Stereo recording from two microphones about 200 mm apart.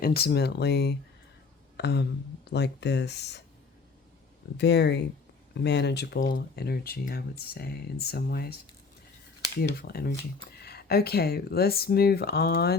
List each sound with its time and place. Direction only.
0.0 s speech: 50° left (ahead or behind)
4.5 s speech: 55° left (ahead or behind)
9.6 s speech: 50° left (ahead or behind)